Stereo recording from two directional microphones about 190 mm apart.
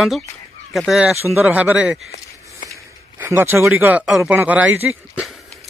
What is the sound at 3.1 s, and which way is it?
Speech, 10° right (ahead or behind).